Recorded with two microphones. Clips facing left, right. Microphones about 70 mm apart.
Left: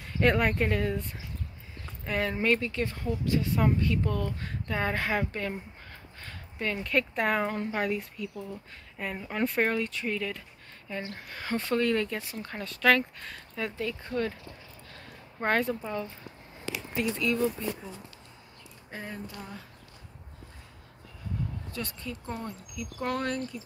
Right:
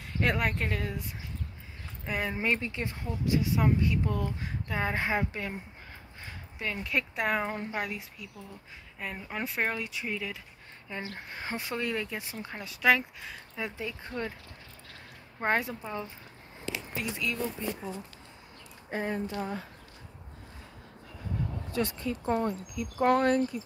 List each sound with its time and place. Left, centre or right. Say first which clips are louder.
0.0 s speech: left 4 dB; centre
2.0 s speech: left 3 dB; centre
11.1 s speech: left 3 dB; right
15.4 s speech: left 2 dB; centre
16.9 s speech: left 7 dB; centre
18.9 s speech: right 7 dB; right
19.3 s speech: right 8 dB; right
21.7 s speech: right 8 dB; right
22.2 s speech: right 12 dB; right